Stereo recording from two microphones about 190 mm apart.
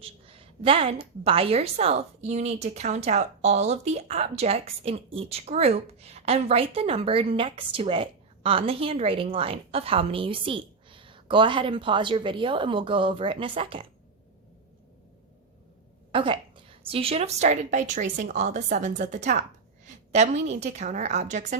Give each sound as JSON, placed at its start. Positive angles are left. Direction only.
{"t": 0.0, "sound": "a woman's voice", "side_deg": -30}
{"t": 16.1, "sound": "a woman's voice", "side_deg": -25}